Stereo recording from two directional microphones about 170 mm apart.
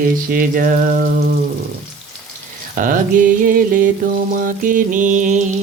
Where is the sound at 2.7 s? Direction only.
55° right (ahead or behind).